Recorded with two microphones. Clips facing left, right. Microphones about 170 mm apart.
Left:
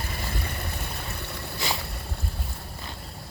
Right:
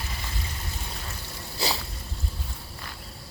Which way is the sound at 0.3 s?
60° left (ahead or behind).